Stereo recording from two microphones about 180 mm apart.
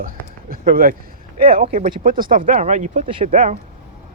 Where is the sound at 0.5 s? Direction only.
50° right (ahead or behind).